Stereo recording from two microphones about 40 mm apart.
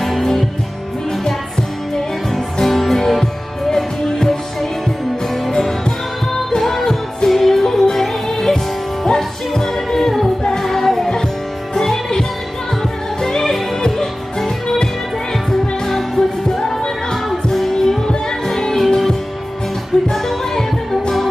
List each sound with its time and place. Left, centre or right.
0.1 s music: centre
2.0 s music: centre
13.2 s music: centre